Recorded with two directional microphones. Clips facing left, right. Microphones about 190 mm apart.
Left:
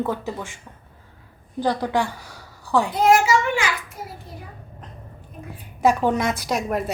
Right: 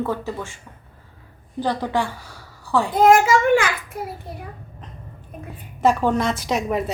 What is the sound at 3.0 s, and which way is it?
A child's voice, 50° right (ahead or behind).